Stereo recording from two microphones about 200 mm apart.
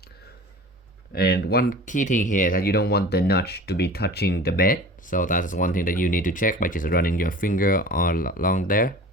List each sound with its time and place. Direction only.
1.1 s speech: 55° left (ahead or behind)